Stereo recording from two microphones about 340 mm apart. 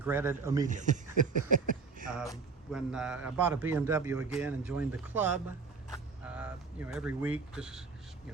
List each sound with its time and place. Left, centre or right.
0.0 s speech: centre
0.7 s speech: right
2.7 s a man's voice: centre
6.2 s a sound: centre
7.5 s a man's voice: centre